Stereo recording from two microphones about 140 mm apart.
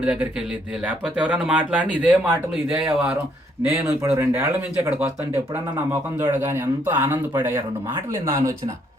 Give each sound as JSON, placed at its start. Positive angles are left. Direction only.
{"t": 0.0, "sound": "speech", "side_deg": -10}
{"t": 3.7, "sound": "speech", "side_deg": -20}